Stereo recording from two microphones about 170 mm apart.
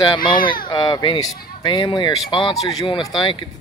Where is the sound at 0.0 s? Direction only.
25° left (ahead or behind).